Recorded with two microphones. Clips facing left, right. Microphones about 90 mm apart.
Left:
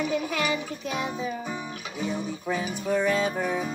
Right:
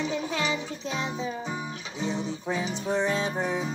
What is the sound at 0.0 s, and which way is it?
Music, 25° right (ahead or behind).